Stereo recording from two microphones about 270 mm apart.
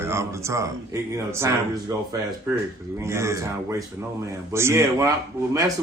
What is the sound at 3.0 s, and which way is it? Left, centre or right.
Speech, centre.